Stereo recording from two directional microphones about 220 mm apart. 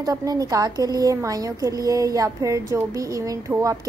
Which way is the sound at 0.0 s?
15° right (ahead or behind).